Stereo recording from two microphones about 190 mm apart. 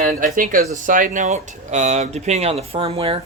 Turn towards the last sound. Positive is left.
turn(degrees=-30)  # may be behind; listen again after turning